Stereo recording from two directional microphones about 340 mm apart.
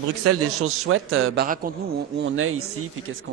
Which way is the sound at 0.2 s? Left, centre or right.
Right.